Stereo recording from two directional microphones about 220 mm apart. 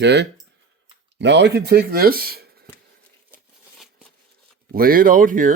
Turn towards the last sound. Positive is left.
turn(degrees=-40)  # may be behind; listen again after turning